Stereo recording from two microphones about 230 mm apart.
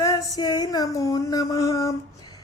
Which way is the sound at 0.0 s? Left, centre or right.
Centre.